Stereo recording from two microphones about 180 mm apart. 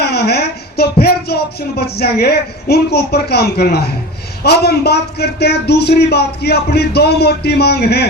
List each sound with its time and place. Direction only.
0.0 s speech: 65° left (ahead or behind)